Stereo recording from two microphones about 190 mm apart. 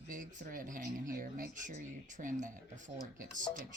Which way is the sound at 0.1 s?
45° right (ahead or behind).